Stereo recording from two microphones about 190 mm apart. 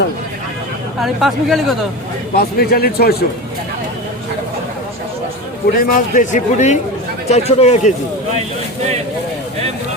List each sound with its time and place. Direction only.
1.0 s speech: centre (ahead or behind)
2.3 s speech: 55° left (ahead or behind)
5.6 s a man's voice: 45° left (ahead or behind)